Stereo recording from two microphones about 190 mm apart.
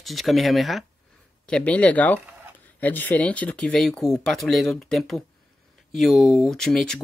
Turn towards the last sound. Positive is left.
turn(degrees=0)  # may be behind; listen again after turning